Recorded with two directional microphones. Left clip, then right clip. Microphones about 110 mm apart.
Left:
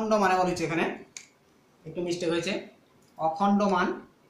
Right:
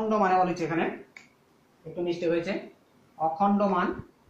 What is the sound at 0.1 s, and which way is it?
Speech, 50° left (ahead or behind).